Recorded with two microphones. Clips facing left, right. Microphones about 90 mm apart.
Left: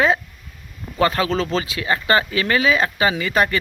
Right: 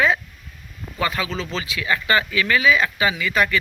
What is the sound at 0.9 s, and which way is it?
Speech, 40° left (ahead or behind).